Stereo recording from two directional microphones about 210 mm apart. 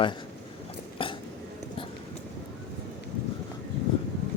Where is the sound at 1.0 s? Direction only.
25° left (ahead or behind).